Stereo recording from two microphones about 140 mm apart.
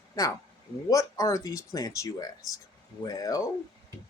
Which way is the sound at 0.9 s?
25° left (ahead or behind).